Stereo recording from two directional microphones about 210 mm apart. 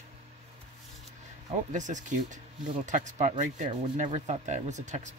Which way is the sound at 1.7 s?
35° right (ahead or behind).